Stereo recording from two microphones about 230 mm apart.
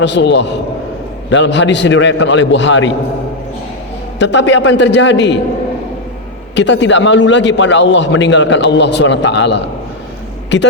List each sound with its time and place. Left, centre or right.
0.0 s a man's voice: left
4.2 s a man's voice: left
6.6 s a man's voice: left